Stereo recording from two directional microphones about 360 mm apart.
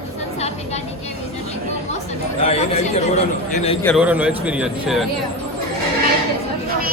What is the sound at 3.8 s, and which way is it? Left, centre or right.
A man's voice, centre.